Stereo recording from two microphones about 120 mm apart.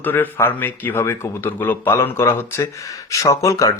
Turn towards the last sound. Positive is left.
turn(degrees=25)  # may be behind; listen again after turning